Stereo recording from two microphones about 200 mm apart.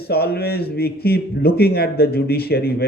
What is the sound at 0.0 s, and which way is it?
Speech, 50° left (ahead or behind).